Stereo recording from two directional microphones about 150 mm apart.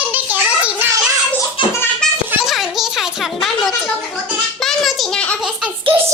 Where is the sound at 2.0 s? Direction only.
5° left (ahead or behind).